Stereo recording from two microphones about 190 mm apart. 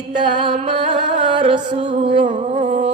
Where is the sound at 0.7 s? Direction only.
25° right (ahead or behind).